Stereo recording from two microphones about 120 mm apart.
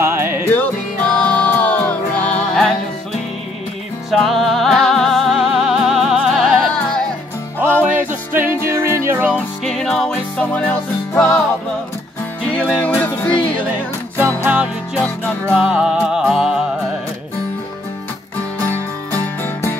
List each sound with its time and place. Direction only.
0.0 s music: 20° right (ahead or behind)
0.5 s music: 15° left (ahead or behind)
4.1 s music: centre (ahead or behind)
7.6 s music: 15° left (ahead or behind)
8.3 s music: 20° right (ahead or behind)
9.7 s music: 5° left (ahead or behind)
12.5 s music: 15° left (ahead or behind)
14.4 s music: 10° right (ahead or behind)